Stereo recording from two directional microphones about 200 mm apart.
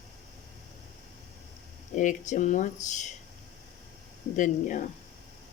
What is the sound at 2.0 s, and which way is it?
Speech, 40° left (ahead or behind).